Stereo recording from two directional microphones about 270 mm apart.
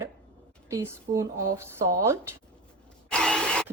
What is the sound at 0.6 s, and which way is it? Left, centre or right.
Speech, centre.